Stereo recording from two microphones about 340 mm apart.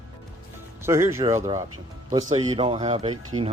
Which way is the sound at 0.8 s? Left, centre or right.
Centre.